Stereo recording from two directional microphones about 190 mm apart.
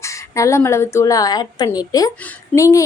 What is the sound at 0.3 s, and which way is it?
A woman's voice, 15° left (ahead or behind).